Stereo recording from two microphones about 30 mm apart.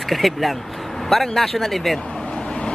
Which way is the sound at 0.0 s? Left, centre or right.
Centre.